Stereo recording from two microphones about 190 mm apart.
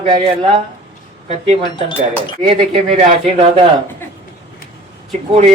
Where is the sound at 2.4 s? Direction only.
30° right (ahead or behind).